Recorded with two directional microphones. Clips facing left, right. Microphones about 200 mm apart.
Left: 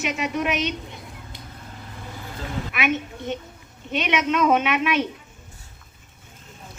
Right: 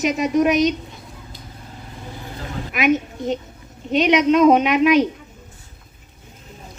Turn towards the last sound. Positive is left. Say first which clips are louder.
# right 8 dB
turn(degrees=-40)  # may be behind; listen again after turning